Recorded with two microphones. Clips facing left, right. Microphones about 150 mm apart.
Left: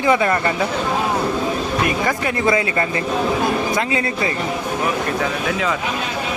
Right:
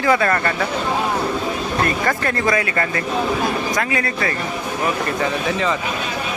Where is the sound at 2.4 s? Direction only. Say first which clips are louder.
Left 3 dB; 20° left (ahead or behind).